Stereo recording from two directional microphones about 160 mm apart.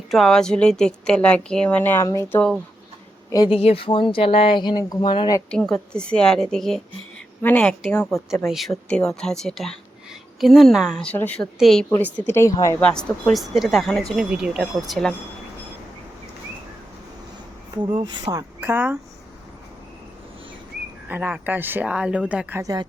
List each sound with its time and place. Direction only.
0.1 s a woman's voice: centre (ahead or behind); by 2.4 s 15° left (ahead or behind)
3.5 s speech: 35° left (ahead or behind)
5.5 s a woman's voice: 5° left (ahead or behind)
12.2 s speech: 15° left (ahead or behind)
12.8 s a woman's voice: 5° left (ahead or behind)
17.8 s speech: 30° right (ahead or behind); by 18.9 s 10° right (ahead or behind)
21.1 s speech: 10° right (ahead or behind)
22.6 s speech: 20° right (ahead or behind)